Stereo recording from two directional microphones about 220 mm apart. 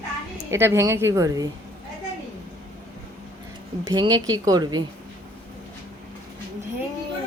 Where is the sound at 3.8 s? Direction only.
20° right (ahead or behind).